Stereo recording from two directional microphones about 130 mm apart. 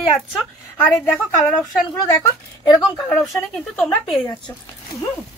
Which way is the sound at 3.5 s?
10° left (ahead or behind).